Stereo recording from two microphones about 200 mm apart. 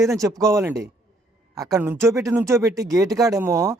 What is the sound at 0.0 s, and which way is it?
Speech, 15° right (ahead or behind).